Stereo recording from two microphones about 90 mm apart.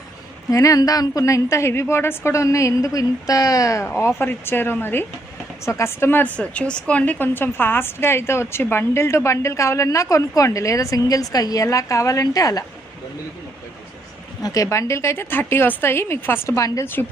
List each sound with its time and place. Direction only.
0.5 s a woman's voice: 40° left (ahead or behind)
3.8 s a woman's voice: 25° left (ahead or behind); by 12.6 s 45° left (ahead or behind)
14.4 s a woman's voice: 40° left (ahead or behind); by 17.1 s 25° left (ahead or behind)